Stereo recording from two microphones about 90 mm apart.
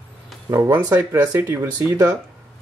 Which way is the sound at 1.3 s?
25° right (ahead or behind).